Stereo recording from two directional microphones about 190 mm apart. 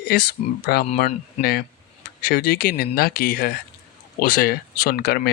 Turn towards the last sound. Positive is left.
turn(degrees=55)  # may be behind; listen again after turning